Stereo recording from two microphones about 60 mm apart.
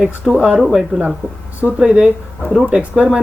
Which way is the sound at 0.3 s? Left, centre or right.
Centre.